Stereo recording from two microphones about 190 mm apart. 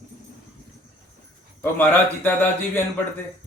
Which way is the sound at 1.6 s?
10° left (ahead or behind).